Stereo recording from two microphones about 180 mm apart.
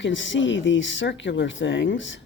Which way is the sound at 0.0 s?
90° left.